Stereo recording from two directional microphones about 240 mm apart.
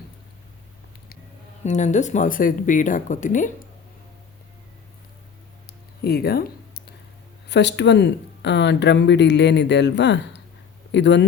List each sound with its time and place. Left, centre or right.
1.6 s speech: left
6.0 s a sound: left
7.4 s speech: left